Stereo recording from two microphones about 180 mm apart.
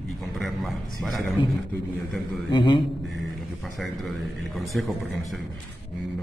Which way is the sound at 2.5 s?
25° left (ahead or behind).